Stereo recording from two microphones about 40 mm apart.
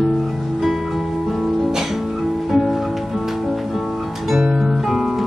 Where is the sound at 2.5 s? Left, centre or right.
Centre.